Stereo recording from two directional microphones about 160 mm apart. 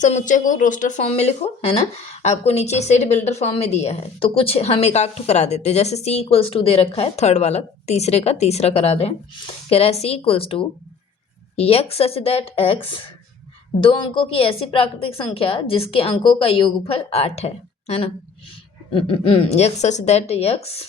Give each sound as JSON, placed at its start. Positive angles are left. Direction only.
{"t": 0.0, "sound": "speech", "side_deg": 50}